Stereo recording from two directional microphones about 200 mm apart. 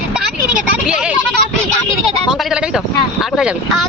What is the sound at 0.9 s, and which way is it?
Speech, 5° right (ahead or behind).